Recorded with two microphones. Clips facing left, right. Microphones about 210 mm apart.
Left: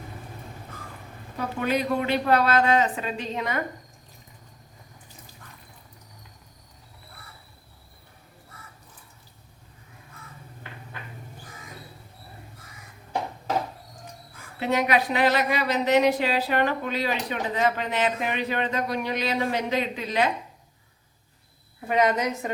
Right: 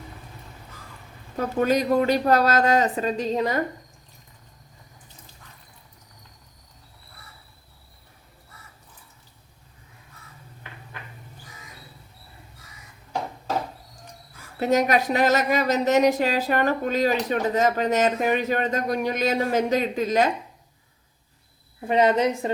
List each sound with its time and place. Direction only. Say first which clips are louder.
1.4 s speech: right 4 dB; 40° right (ahead or behind)
5.4 s a sound: left 3 dB; 55° left (ahead or behind)
14.6 s speech: right 3 dB; 45° right (ahead or behind)
21.8 s a woman's voice: right 3 dB; 30° right (ahead or behind)